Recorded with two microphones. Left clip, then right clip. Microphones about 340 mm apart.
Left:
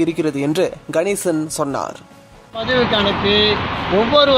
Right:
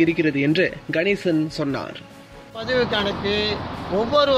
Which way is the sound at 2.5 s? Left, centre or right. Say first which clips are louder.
Left 5 dB; centre.